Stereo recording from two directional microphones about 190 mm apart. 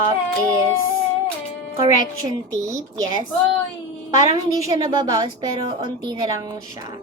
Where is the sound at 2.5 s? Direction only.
20° right (ahead or behind).